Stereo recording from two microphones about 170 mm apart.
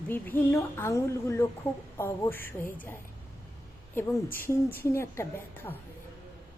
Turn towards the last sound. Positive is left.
turn(degrees=15)  # may be behind; listen again after turning